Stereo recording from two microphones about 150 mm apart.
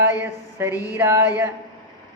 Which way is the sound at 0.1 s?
15° right (ahead or behind).